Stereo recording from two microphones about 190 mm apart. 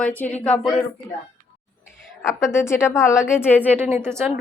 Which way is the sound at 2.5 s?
15° left (ahead or behind).